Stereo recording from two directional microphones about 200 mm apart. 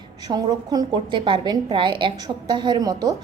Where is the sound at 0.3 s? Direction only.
20° right (ahead or behind).